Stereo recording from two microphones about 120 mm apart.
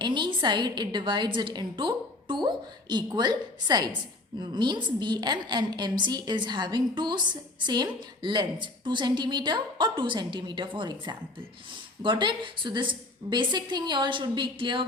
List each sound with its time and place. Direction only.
0.0 s a woman's voice: 40° right (ahead or behind)